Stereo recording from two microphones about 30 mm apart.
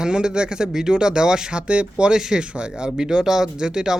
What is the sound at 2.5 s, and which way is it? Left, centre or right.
Speech, right.